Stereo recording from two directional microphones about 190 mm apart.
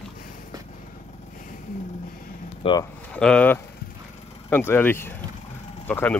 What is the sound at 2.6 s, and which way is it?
Speech, 20° left (ahead or behind).